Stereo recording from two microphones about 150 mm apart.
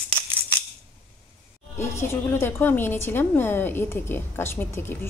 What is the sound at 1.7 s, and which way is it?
A woman's voice, 15° left (ahead or behind).